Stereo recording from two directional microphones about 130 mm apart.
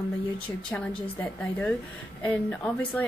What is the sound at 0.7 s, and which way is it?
Speech, 10° left (ahead or behind).